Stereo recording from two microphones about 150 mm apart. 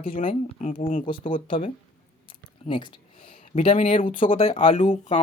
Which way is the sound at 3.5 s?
55° left (ahead or behind).